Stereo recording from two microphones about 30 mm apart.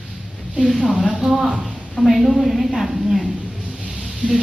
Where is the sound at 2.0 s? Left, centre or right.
Centre.